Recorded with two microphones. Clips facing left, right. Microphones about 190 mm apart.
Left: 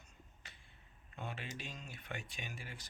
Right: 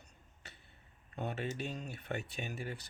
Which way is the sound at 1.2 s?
40° right (ahead or behind).